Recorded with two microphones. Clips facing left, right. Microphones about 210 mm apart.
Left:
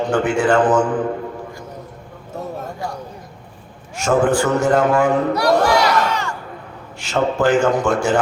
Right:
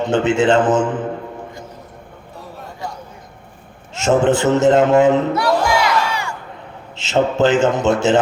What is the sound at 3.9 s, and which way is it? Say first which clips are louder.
A man's voice: right 1 dB; 25° right (ahead or behind).